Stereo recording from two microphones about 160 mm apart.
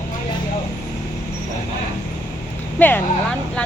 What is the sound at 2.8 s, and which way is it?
Speech, 10° left (ahead or behind).